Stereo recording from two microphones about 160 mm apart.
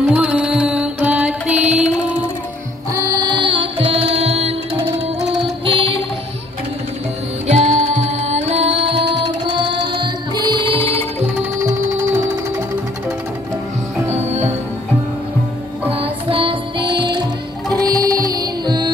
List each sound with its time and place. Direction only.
0.0 s music: 5° right (ahead or behind)
2.9 s music: 20° right (ahead or behind)
7.4 s music: 45° right (ahead or behind)
15.9 s music: 35° right (ahead or behind)